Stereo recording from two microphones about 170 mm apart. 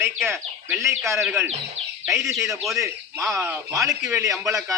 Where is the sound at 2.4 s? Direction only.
15° right (ahead or behind).